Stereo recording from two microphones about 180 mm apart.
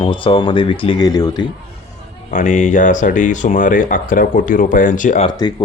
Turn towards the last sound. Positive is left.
turn(degrees=25)  # may be behind; listen again after turning